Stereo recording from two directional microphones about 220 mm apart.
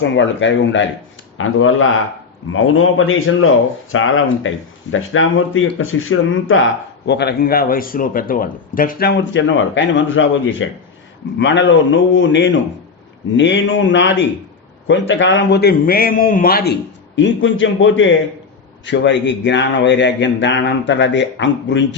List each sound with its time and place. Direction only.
0.0 s a man's voice: 55° left (ahead or behind); by 16.7 s 40° left (ahead or behind)
17.2 s speech: 55° left (ahead or behind)